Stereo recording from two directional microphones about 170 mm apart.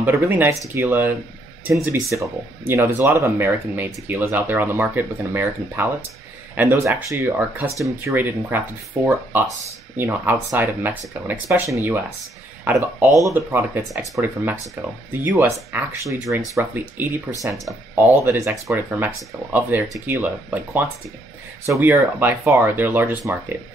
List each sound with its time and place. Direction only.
0.0 s speech: 10° right (ahead or behind)